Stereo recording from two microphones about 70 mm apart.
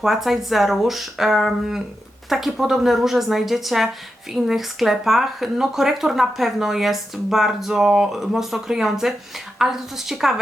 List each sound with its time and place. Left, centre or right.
0.0 s speech: centre